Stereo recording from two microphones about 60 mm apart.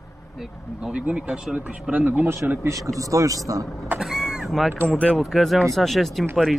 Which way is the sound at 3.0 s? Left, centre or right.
Right.